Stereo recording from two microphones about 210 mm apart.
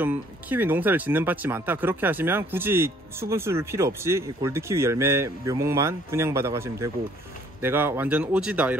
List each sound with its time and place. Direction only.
0.0 s speech: 10° right (ahead or behind)